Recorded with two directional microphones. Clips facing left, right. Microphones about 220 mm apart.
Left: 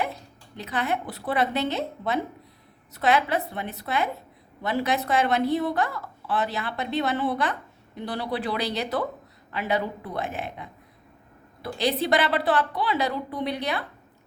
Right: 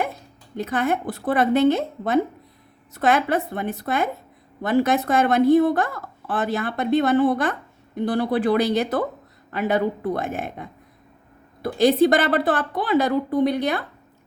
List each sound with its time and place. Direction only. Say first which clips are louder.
0.0 s a woman's voice: right 3 dB; 50° right (ahead or behind)